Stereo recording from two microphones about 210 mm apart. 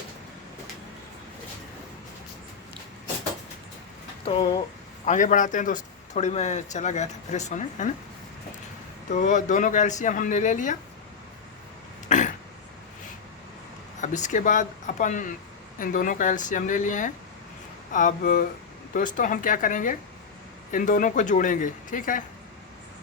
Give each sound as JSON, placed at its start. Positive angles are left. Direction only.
{"t": 4.3, "sound": "speech", "side_deg": 25}
{"t": 5.0, "sound": "speech", "side_deg": 35}
{"t": 9.1, "sound": "speech", "side_deg": 35}
{"t": 12.0, "sound": "a sound", "side_deg": 35}
{"t": 14.0, "sound": "speech", "side_deg": 35}